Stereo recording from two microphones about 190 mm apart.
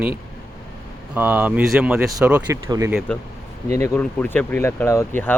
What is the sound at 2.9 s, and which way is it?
Speech, centre (ahead or behind).